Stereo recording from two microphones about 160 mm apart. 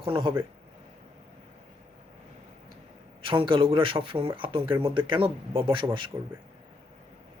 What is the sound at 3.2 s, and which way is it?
Speech, 30° right (ahead or behind).